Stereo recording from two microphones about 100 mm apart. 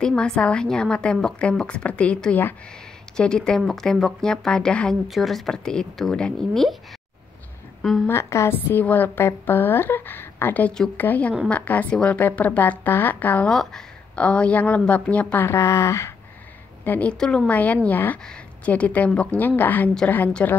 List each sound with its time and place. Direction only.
0.0 s a woman's voice: 5° left (ahead or behind)
8.1 s a woman's voice: 25° left (ahead or behind)
13.5 s a woman's voice: 5° left (ahead or behind); by 16.1 s 30° left (ahead or behind)
16.8 s a woman's voice: 15° left (ahead or behind)